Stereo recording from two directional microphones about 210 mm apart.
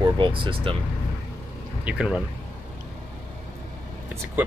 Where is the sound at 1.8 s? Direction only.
5° right (ahead or behind).